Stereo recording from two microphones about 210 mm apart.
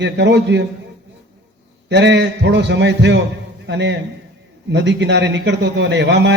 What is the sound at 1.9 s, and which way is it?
A man's voice, 55° right (ahead or behind).